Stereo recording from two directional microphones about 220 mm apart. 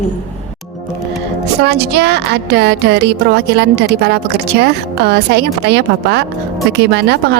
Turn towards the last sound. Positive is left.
turn(degrees=-50)  # may be behind; listen again after turning